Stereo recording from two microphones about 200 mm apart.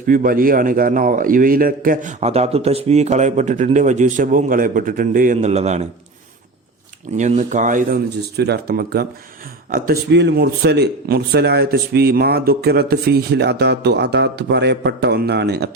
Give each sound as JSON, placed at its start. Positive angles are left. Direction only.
{"t": 0.1, "sound": "a man's voice", "side_deg": -45}
{"t": 7.2, "sound": "a man's voice", "side_deg": -35}
{"t": 8.4, "sound": "a man's voice", "side_deg": -55}